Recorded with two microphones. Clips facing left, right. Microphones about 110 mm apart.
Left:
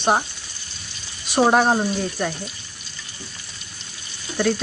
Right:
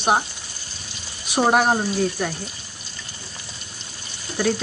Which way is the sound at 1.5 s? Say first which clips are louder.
Left 1 dB; 5° right (ahead or behind).